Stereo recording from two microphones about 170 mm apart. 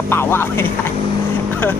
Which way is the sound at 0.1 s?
15° left (ahead or behind).